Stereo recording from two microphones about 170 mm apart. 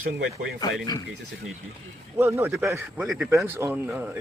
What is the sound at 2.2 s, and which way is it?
Speech, 15° right (ahead or behind).